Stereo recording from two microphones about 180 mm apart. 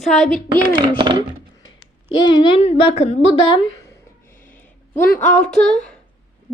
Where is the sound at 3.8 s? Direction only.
15° left (ahead or behind).